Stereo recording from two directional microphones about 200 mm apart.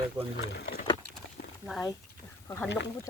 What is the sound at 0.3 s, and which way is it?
Speech, 55° left (ahead or behind).